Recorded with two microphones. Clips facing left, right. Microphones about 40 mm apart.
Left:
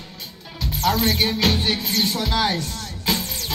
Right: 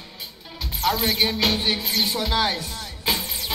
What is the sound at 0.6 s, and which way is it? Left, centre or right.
Music, centre.